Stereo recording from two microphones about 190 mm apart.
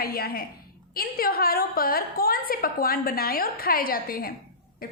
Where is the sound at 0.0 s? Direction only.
50° left (ahead or behind).